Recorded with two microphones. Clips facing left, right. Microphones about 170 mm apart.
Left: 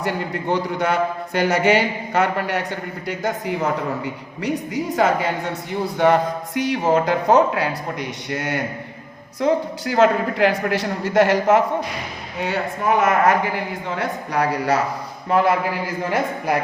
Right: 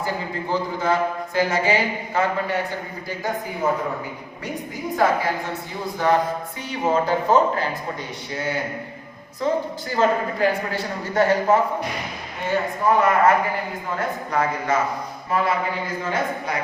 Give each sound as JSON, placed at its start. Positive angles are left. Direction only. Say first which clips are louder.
{"t": 0.0, "sound": "a man's voice", "louder": "left 3 dB", "side_deg": 75}